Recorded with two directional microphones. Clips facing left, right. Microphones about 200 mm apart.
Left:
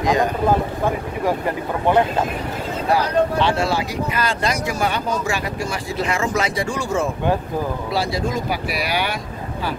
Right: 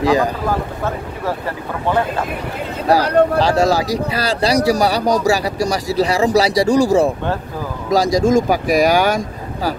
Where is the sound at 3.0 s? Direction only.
65° right (ahead or behind).